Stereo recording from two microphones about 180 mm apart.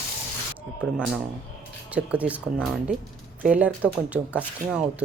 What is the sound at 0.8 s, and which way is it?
Speech, 5° right (ahead or behind).